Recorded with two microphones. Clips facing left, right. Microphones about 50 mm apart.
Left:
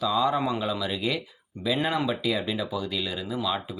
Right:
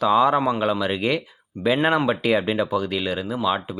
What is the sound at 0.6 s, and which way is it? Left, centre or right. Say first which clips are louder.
Speech: right 6 dB; right.